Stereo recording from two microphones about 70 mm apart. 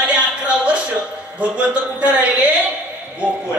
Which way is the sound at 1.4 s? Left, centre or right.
Centre.